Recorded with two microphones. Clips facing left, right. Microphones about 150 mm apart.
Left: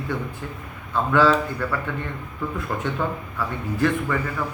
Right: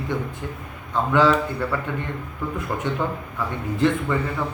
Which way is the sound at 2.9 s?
15° right (ahead or behind).